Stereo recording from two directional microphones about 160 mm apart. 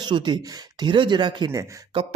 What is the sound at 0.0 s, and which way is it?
Speech, 30° right (ahead or behind).